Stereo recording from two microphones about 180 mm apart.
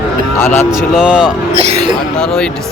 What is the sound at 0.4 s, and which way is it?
Speech, 15° left (ahead or behind).